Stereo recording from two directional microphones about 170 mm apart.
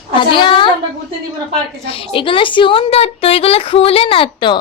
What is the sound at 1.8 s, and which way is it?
Speech, 35° left (ahead or behind).